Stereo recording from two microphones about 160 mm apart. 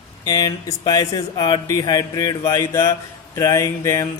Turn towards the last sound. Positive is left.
turn(degrees=20)  # may be behind; listen again after turning